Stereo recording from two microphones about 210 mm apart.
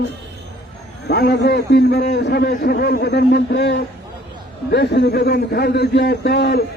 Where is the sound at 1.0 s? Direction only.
50° left (ahead or behind).